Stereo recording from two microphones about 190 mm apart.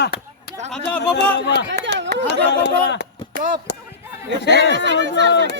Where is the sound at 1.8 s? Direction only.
70° right (ahead or behind).